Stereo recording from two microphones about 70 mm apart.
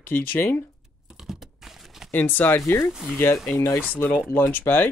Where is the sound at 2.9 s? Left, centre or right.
Centre.